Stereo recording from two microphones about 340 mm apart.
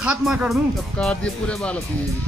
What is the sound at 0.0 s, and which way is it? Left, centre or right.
Speech, centre.